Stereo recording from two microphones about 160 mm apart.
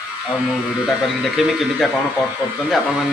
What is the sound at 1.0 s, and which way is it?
Speech, centre (ahead or behind).